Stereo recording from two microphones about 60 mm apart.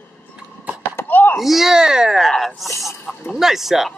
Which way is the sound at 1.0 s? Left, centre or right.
Left.